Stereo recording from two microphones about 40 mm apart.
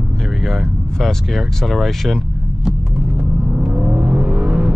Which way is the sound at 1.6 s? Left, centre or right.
Centre.